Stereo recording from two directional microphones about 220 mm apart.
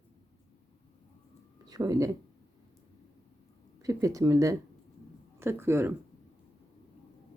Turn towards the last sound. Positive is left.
turn(degrees=-10)  # may be behind; listen again after turning